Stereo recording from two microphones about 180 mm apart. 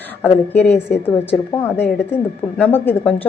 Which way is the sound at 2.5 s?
10° left (ahead or behind).